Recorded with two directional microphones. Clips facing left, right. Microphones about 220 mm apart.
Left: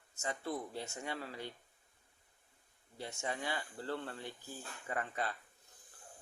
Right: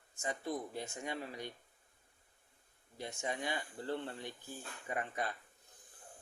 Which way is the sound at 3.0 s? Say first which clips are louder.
Right 1 dB; 15° right (ahead or behind).